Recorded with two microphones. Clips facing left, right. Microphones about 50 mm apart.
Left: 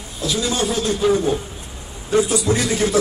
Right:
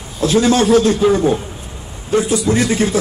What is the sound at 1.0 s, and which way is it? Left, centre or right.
Speech, right.